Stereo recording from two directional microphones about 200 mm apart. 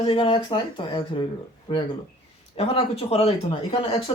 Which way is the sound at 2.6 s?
30° left (ahead or behind).